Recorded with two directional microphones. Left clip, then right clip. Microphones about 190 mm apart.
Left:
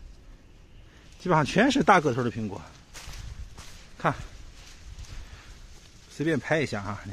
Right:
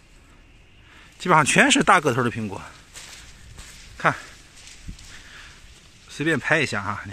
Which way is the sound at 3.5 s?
5° right (ahead or behind).